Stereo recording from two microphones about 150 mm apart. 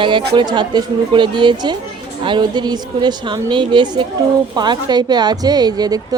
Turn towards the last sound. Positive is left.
turn(degrees=-25)  # may be behind; listen again after turning